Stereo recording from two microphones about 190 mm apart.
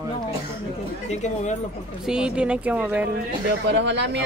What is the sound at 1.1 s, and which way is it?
Speech, 40° left (ahead or behind).